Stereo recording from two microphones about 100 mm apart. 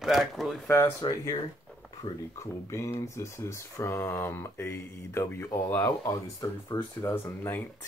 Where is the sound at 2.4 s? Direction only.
30° left (ahead or behind).